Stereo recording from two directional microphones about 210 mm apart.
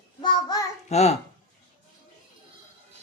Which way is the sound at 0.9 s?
30° left (ahead or behind).